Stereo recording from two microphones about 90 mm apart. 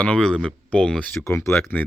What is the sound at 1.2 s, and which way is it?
Speech, 35° left (ahead or behind).